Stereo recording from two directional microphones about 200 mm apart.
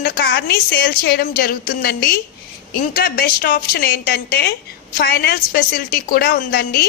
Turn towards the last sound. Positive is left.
turn(degrees=50)  # may be behind; listen again after turning